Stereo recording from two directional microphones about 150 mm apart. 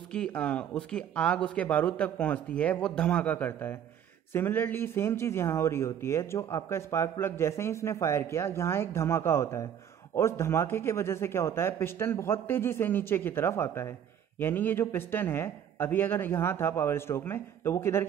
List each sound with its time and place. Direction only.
0.1 s speech: 5° left (ahead or behind)